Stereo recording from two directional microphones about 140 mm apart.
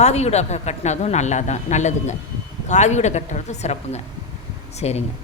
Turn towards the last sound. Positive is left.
turn(degrees=50)  # may be behind; listen again after turning